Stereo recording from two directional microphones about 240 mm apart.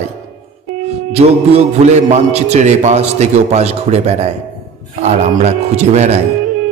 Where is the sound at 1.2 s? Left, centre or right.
Right.